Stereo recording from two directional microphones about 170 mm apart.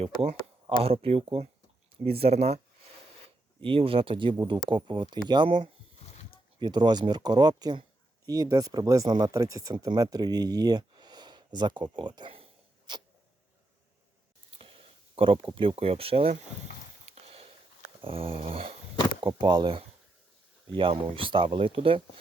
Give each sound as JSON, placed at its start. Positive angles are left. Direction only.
{"t": 0.8, "sound": "speech", "side_deg": -35}
{"t": 3.6, "sound": "speech", "side_deg": -30}
{"t": 14.6, "sound": "a sound", "side_deg": -35}
{"t": 15.5, "sound": "speech", "side_deg": -35}
{"t": 17.1, "sound": "sniff", "side_deg": -35}
{"t": 18.0, "sound": "speech", "side_deg": -30}